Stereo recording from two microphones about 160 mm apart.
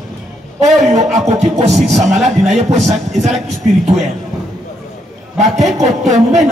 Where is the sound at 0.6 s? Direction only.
45° right (ahead or behind).